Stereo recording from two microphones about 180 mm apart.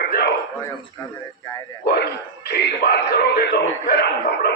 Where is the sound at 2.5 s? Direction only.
65° left (ahead or behind).